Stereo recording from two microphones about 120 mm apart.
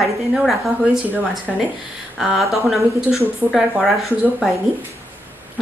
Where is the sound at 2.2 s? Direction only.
Centre (ahead or behind).